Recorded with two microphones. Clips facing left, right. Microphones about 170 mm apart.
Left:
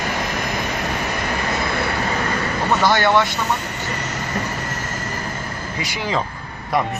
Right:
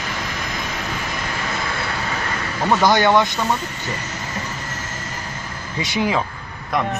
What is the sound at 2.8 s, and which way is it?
Speech, 15° right (ahead or behind).